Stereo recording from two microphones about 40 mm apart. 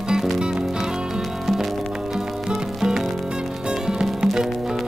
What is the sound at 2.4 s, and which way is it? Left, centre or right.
Music, centre.